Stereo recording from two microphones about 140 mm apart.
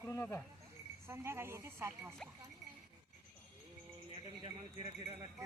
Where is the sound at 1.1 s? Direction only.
20° right (ahead or behind).